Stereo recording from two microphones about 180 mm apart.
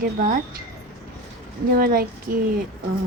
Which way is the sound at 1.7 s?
55° right (ahead or behind).